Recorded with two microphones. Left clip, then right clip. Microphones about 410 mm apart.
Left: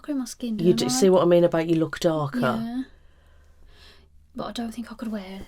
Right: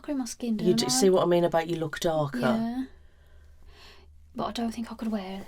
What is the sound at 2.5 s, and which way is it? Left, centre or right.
Speech, right.